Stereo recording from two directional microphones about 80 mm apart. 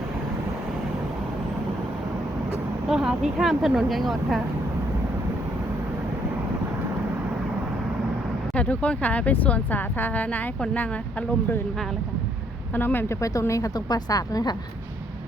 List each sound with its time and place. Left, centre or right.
2.9 s speech: centre
8.5 s speech: centre
12.7 s speech: left
13.5 s a woman's voice: left